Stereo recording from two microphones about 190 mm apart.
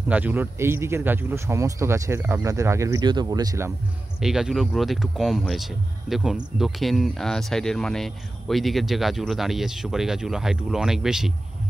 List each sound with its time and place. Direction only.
0.1 s a man's voice: 10° right (ahead or behind)
4.2 s speech: 5° right (ahead or behind)